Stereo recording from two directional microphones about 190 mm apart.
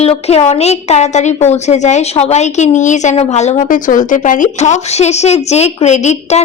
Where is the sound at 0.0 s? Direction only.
35° left (ahead or behind).